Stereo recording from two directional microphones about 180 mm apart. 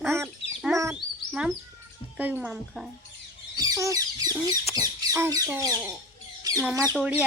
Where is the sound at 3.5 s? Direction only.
20° right (ahead or behind).